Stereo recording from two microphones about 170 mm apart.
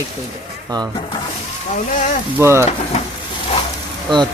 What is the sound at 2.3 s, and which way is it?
Speech, 15° right (ahead or behind).